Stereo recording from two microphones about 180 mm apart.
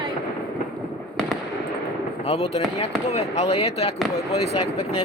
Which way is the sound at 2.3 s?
35° left (ahead or behind).